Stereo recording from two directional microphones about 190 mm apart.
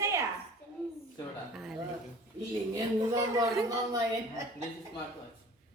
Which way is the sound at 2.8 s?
20° right (ahead or behind).